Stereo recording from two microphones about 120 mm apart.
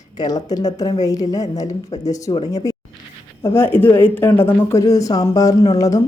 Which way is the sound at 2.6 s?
30° left (ahead or behind).